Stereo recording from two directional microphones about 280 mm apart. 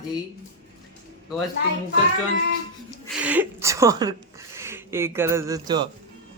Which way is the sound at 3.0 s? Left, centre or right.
Centre.